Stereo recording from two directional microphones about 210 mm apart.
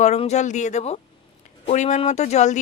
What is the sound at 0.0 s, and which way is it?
Speech, 30° left (ahead or behind).